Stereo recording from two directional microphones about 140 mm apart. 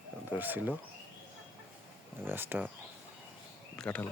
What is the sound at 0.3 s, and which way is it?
Speech, 10° right (ahead or behind).